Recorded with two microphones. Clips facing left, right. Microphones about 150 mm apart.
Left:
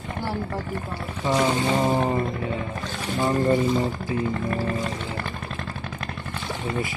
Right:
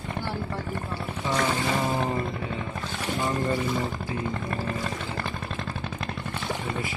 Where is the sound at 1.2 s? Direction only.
20° left (ahead or behind).